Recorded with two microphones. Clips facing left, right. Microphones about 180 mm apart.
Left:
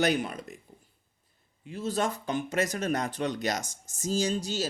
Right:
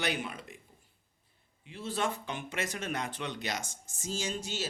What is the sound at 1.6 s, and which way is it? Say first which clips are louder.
Speech: left 4 dB; 40° left (ahead or behind).